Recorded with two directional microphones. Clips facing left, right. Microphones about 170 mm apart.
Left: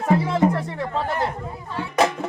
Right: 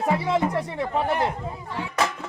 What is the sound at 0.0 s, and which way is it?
Speech, 20° right (ahead or behind).